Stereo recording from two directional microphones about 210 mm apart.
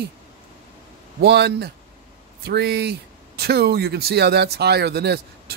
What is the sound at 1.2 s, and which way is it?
Speech, 50° right (ahead or behind).